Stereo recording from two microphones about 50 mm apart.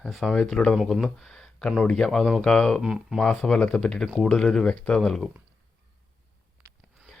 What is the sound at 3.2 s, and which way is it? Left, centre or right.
Speech, centre.